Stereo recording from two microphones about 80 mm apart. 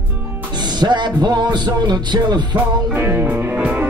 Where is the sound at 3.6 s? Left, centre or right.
Centre.